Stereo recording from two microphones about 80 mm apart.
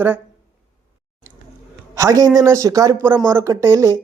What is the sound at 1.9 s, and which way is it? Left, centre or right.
A man's voice, right.